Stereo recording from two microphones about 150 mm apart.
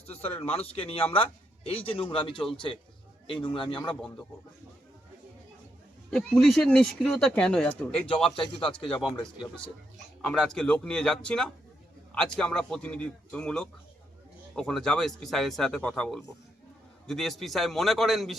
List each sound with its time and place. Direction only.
0.0 s a man's voice: 45° left (ahead or behind)
3.4 s a man's voice: 35° left (ahead or behind)
6.1 s speech: 5° left (ahead or behind)
8.0 s a man's voice: 35° left (ahead or behind)
8.7 s speech: 5° left (ahead or behind)